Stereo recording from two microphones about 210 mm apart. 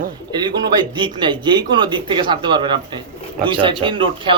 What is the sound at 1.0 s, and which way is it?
A man's voice, 20° right (ahead or behind).